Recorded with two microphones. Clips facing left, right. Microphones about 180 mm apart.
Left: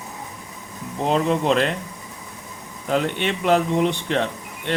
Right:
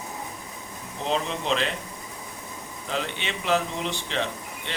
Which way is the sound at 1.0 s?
50° left (ahead or behind).